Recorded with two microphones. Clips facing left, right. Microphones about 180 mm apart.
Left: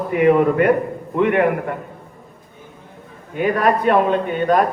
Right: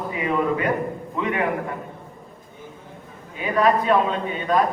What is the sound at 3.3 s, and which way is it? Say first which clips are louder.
A man's voice: left 2 dB; 60° left (ahead or behind).